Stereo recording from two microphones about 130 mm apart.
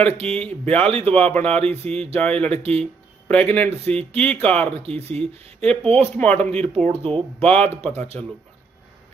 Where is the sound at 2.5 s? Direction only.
50° right (ahead or behind).